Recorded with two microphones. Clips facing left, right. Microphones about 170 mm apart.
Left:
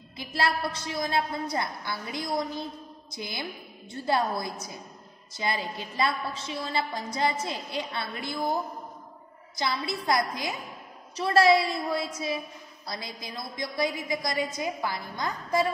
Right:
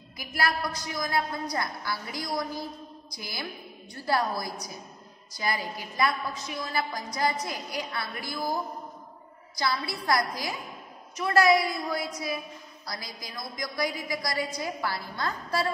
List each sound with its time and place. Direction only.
0.2 s a woman's voice: 25° left (ahead or behind)
9.6 s a woman's voice: 20° left (ahead or behind)